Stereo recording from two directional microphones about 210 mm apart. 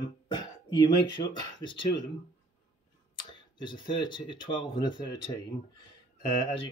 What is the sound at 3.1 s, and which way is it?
Speech, 20° left (ahead or behind).